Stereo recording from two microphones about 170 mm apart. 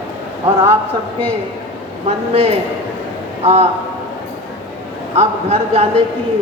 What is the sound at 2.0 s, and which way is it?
A woman's voice, 35° right (ahead or behind).